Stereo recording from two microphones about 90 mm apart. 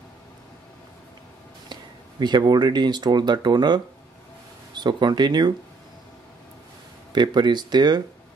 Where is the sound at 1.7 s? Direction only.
55° right (ahead or behind).